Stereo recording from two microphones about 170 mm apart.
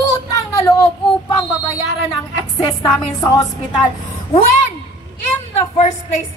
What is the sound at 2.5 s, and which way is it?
A woman's voice, 20° left (ahead or behind).